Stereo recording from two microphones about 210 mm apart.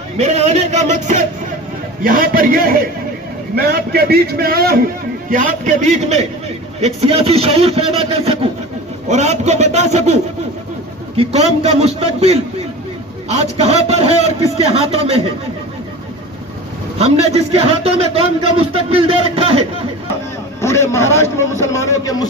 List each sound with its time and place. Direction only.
0.2 s a man's voice: 30° right (ahead or behind); by 4.9 s 45° right (ahead or behind)
5.3 s a man's voice: 35° right (ahead or behind)
11.2 s a man's voice: 30° right (ahead or behind)
17.0 s a man's voice: 30° right (ahead or behind)
20.6 s a man's voice: 15° left (ahead or behind)